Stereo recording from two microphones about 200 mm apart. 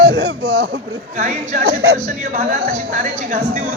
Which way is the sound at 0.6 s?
40° right (ahead or behind).